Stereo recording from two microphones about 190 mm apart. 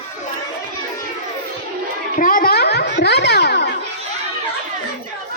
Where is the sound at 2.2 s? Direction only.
45° left (ahead or behind); by 3.7 s 60° left (ahead or behind).